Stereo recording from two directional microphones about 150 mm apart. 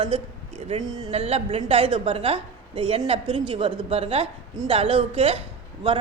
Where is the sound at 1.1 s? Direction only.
40° right (ahead or behind).